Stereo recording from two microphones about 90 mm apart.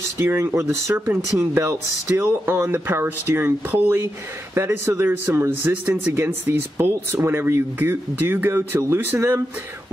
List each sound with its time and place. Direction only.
0.2 s speech: 30° right (ahead or behind)